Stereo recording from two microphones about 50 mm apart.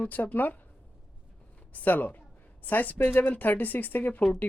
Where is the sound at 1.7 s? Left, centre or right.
Left.